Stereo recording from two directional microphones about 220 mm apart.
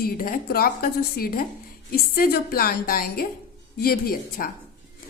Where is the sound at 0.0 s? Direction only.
40° left (ahead or behind).